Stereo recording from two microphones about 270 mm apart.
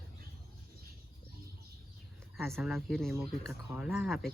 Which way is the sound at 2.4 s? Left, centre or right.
Centre.